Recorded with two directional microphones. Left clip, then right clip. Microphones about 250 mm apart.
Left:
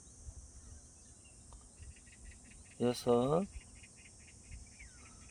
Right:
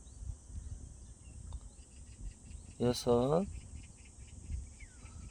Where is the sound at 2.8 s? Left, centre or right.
Centre.